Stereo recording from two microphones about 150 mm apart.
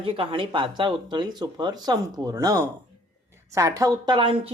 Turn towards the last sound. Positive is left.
turn(degrees=-35)  # may be behind; listen again after turning